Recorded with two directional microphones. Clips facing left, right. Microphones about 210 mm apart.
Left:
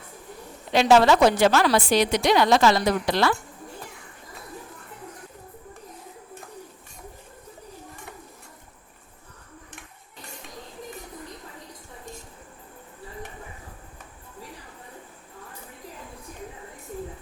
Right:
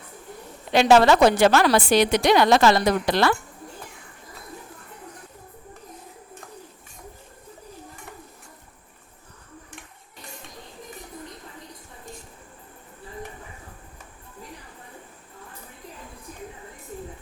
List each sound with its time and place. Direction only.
0.7 s a woman's voice: 65° right (ahead or behind)